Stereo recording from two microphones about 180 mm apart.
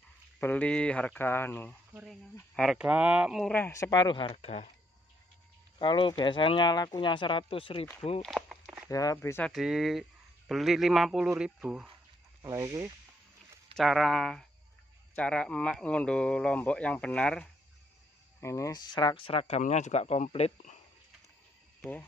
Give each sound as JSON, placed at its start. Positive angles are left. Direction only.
{"t": 0.4, "sound": "speech", "side_deg": 10}
{"t": 2.5, "sound": "speech", "side_deg": 0}
{"t": 3.5, "sound": "speech", "side_deg": 15}
{"t": 5.8, "sound": "speech", "side_deg": 25}
{"t": 8.2, "sound": "walk", "side_deg": 0}
{"t": 8.9, "sound": "speech", "side_deg": 20}
{"t": 9.5, "sound": "speech", "side_deg": 0}
{"t": 12.4, "sound": "speech", "side_deg": -15}
{"t": 13.7, "sound": "speech", "side_deg": 0}
{"t": 18.4, "sound": "speech", "side_deg": 15}